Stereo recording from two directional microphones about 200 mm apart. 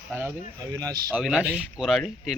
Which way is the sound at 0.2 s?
15° right (ahead or behind).